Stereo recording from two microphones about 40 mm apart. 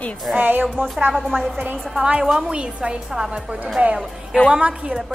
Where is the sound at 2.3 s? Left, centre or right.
Right.